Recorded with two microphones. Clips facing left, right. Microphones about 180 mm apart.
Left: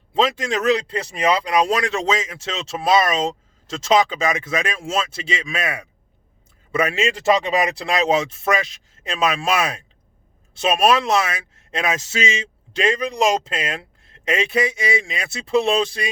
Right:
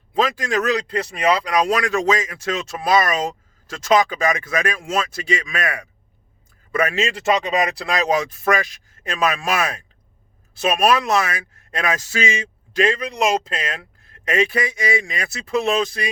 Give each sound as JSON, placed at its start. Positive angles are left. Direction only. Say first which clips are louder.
{"t": 0.1, "sound": "speech", "louder": "even", "side_deg": 25}
{"t": 10.8, "sound": "speech", "louder": "even", "side_deg": 25}